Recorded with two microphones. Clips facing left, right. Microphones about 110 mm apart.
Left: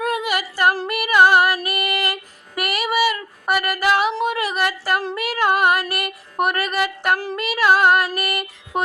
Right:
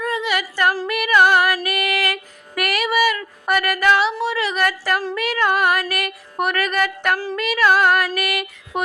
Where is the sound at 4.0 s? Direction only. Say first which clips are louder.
Even; 50° left (ahead or behind).